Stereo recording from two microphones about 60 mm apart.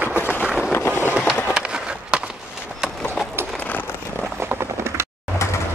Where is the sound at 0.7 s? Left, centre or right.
Left.